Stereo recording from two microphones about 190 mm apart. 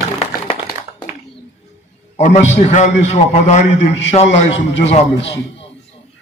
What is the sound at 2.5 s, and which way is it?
A man's voice, 40° left (ahead or behind).